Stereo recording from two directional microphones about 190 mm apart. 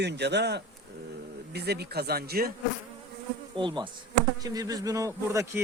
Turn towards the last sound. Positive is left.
turn(degrees=-15)  # may be behind; listen again after turning